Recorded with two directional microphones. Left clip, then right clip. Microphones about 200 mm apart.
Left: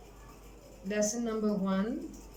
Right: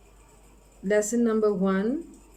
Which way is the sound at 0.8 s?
60° right (ahead or behind).